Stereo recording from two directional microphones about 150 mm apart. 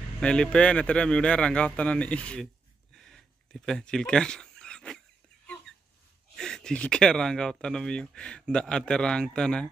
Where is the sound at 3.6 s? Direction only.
5° left (ahead or behind).